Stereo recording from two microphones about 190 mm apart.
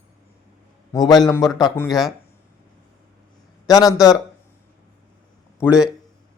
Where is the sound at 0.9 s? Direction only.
20° left (ahead or behind).